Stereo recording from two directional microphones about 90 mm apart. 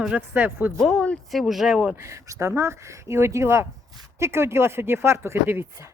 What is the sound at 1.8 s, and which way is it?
Speech, 15° right (ahead or behind).